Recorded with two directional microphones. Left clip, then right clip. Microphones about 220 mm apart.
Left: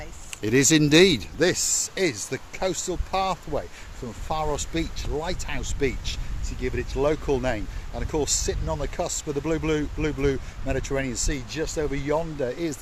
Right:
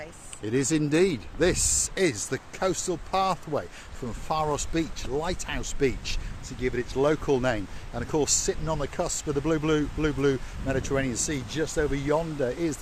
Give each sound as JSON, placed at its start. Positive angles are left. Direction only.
{"t": 0.4, "sound": "speech", "side_deg": 40}
{"t": 1.5, "sound": "speech", "side_deg": 0}